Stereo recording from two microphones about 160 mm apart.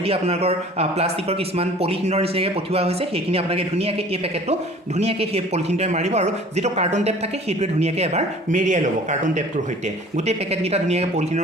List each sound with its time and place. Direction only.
0.0 s speech: 40° right (ahead or behind)